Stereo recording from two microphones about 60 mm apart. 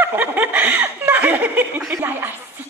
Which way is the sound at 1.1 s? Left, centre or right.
Right.